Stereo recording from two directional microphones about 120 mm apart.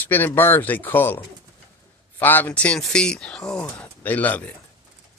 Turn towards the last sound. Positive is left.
turn(degrees=10)  # may be behind; listen again after turning